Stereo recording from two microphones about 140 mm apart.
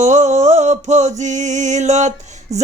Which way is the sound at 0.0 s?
55° right (ahead or behind).